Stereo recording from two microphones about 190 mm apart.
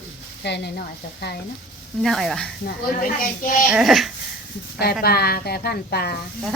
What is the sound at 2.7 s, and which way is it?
Speech, 50° left (ahead or behind).